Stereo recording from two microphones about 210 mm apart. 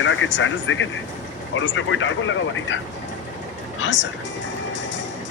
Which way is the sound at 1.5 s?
65° left (ahead or behind).